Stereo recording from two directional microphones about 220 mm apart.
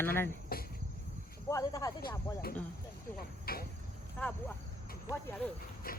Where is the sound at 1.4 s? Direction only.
15° left (ahead or behind).